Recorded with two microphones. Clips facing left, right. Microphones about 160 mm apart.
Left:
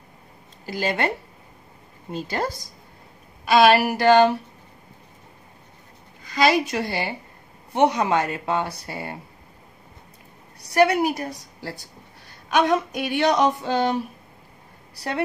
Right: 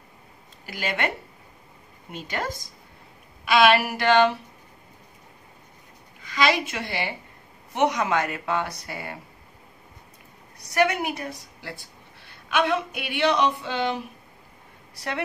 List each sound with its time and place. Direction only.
0.7 s speech: 35° left (ahead or behind)
6.2 s a woman's voice: 40° left (ahead or behind)
10.6 s speech: 35° left (ahead or behind)
15.0 s speech: 35° left (ahead or behind)